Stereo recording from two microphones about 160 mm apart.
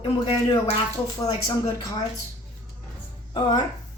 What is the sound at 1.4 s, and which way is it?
Speech, 20° left (ahead or behind).